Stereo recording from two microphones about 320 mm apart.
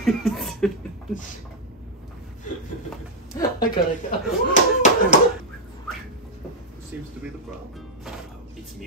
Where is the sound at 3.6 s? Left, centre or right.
Left.